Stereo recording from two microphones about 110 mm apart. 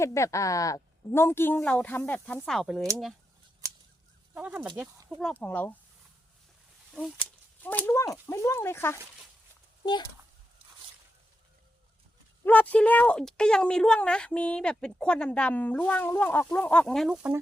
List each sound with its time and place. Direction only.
0.0 s a woman's voice: 25° left (ahead or behind)
2.5 s speech: centre (ahead or behind)
4.4 s speech: 10° right (ahead or behind)
5.3 s speech: 15° left (ahead or behind)
6.9 s speech: 5° left (ahead or behind)
7.6 s a woman's voice: 15° left (ahead or behind)
9.8 s speech: 40° left (ahead or behind)
12.5 s speech: 15° left (ahead or behind)